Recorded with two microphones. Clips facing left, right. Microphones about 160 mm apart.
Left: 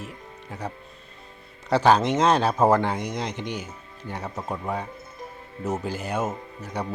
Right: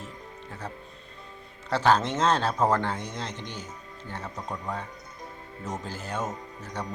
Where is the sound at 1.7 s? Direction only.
15° left (ahead or behind).